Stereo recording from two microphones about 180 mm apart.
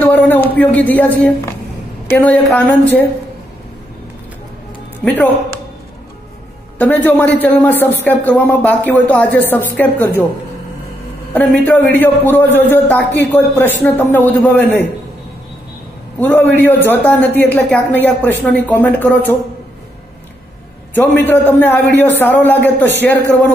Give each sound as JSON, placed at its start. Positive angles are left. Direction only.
{"t": 0.0, "sound": "a sound", "side_deg": 10}
{"t": 0.6, "sound": "speech", "side_deg": 10}
{"t": 5.0, "sound": "speech", "side_deg": 10}
{"t": 6.8, "sound": "speech", "side_deg": 10}
{"t": 11.3, "sound": "speech", "side_deg": 10}
{"t": 16.2, "sound": "speech", "side_deg": 10}
{"t": 20.9, "sound": "speech", "side_deg": 10}